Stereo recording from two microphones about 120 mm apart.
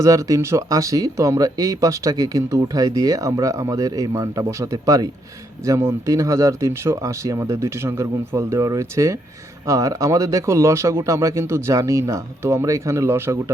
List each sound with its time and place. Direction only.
0.0 s speech: 25° right (ahead or behind)